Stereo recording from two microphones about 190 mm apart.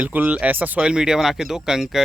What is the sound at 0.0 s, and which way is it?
Speech, 10° right (ahead or behind).